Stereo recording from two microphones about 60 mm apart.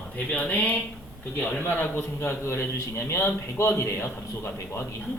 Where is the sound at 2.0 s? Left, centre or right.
Left.